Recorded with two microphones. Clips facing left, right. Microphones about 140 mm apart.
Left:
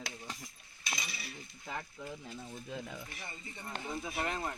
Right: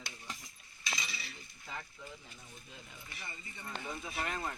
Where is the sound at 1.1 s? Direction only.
50° left (ahead or behind); by 3.0 s 90° left.